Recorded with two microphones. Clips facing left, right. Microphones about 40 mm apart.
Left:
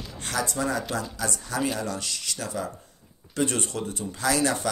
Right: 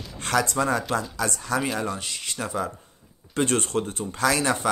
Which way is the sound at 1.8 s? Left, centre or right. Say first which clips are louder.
Right 2 dB; right.